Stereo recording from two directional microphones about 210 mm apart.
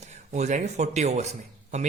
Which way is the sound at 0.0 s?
35° right (ahead or behind).